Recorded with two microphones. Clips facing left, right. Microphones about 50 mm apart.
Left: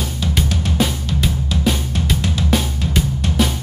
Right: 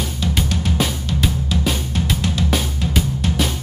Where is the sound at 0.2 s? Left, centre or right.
Centre.